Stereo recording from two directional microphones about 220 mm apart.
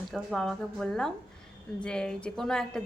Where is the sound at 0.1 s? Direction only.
Centre (ahead or behind).